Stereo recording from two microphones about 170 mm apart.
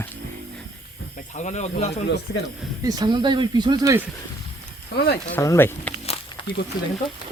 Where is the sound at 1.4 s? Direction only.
45° left (ahead or behind).